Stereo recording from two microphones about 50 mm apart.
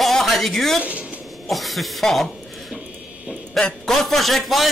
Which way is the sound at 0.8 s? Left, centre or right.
Right.